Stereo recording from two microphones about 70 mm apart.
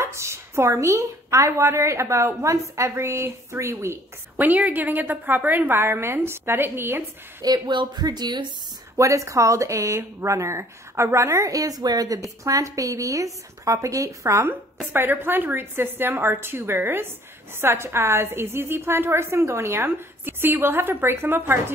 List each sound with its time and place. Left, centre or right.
0.0 s a woman's voice: right
4.4 s a woman's voice: right
7.4 s speech: right
8.9 s a woman's voice: right
14.9 s a woman's voice: right